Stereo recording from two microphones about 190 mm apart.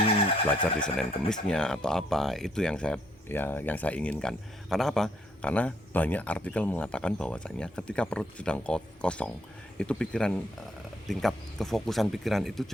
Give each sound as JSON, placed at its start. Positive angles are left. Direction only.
{"t": 0.0, "sound": "vehicle", "side_deg": 30}
{"t": 0.8, "sound": "speech", "side_deg": 5}